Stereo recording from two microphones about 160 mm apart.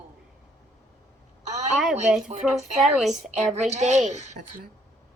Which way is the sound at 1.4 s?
45° right (ahead or behind).